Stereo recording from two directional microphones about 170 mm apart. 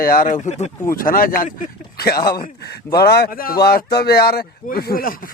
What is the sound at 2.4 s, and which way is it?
A man's voice, 70° left (ahead or behind).